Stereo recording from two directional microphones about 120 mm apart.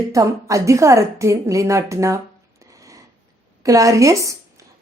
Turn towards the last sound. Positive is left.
turn(degrees=-25)  # may be behind; listen again after turning